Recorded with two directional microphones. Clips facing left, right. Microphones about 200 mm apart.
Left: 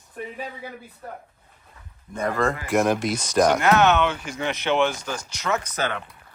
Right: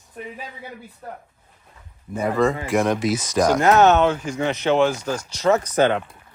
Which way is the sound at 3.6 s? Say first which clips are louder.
Right 4 dB; 40° right (ahead or behind).